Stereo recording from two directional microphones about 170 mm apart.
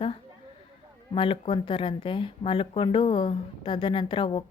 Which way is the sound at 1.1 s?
30° left (ahead or behind).